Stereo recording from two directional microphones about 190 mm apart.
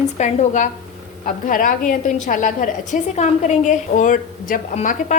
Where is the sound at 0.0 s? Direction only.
40° left (ahead or behind).